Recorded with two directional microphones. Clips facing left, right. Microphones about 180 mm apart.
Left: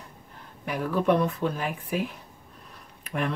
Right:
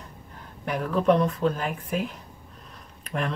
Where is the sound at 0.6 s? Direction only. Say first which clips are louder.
Right 2 dB; 5° left (ahead or behind).